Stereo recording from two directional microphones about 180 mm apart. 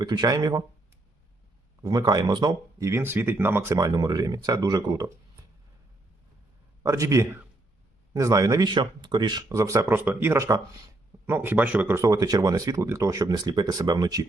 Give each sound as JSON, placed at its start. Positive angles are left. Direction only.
{"t": 0.0, "sound": "speech", "side_deg": -20}
{"t": 1.8, "sound": "speech", "side_deg": -20}
{"t": 6.8, "sound": "a man's voice", "side_deg": -15}